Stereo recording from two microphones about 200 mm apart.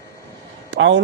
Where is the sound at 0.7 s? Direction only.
65° right (ahead or behind).